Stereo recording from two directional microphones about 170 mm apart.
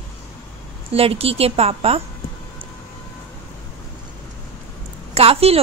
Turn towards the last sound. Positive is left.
turn(degrees=-35)  # may be behind; listen again after turning